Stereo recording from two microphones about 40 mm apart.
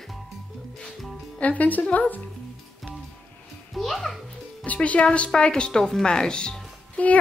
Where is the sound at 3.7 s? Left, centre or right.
Centre.